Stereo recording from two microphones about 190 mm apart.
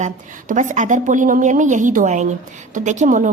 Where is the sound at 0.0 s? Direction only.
40° right (ahead or behind).